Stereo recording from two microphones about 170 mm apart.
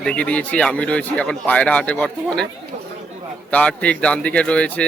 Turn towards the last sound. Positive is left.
turn(degrees=5)  # may be behind; listen again after turning